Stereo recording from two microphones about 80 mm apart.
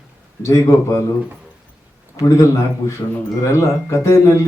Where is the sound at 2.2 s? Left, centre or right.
Left.